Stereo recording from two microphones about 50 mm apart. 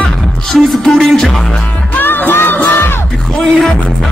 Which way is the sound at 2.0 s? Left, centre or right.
Left.